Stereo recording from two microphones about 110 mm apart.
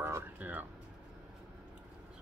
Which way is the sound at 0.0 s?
20° right (ahead or behind).